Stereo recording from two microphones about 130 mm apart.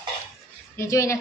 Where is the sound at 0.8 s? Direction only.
25° left (ahead or behind).